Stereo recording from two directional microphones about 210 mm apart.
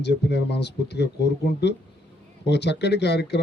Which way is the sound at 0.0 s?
50° left (ahead or behind).